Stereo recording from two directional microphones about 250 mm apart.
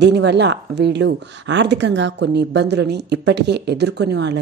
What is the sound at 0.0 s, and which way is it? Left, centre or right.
A woman's voice, right.